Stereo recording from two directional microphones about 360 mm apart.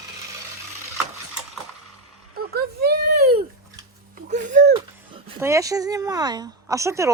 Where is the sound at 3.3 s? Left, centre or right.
Centre.